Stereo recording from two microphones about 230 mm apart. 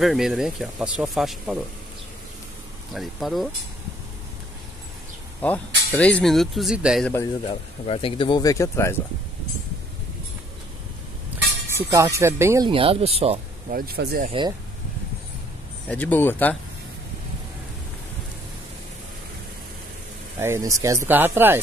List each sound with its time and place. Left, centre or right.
0.0 s speech: centre
2.9 s speech: centre
5.4 s speech: centre
7.8 s speech: left
11.3 s a sound: centre
11.7 s speech: centre
13.7 s speech: right
15.9 s speech: centre
20.3 s speech: centre